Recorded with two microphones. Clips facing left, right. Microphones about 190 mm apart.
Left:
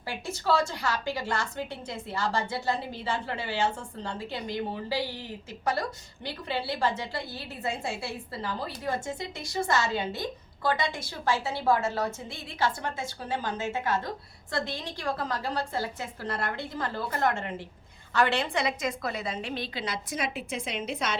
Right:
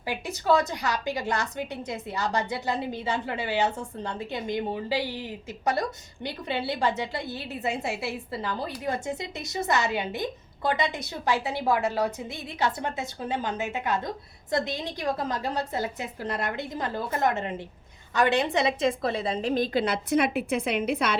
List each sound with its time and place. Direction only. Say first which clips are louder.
0.0 s a woman's voice: right 2 dB; 15° right (ahead or behind); by 21.2 s 60° right (ahead or behind)